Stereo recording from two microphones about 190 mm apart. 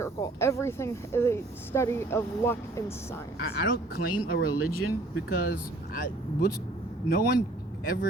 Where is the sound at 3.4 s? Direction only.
55° left (ahead or behind).